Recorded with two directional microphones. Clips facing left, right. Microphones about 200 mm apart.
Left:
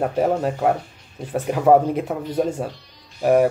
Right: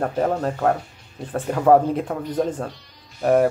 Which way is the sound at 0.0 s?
10° left (ahead or behind).